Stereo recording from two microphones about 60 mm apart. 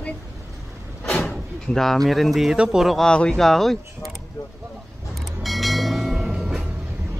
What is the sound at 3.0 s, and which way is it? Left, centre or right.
Speech, centre.